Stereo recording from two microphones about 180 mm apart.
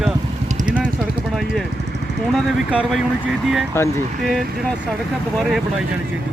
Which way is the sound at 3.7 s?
15° left (ahead or behind).